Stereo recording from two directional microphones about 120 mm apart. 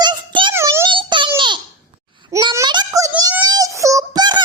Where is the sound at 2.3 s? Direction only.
25° right (ahead or behind).